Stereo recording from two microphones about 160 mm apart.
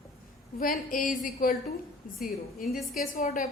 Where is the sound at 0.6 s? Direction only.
60° left (ahead or behind).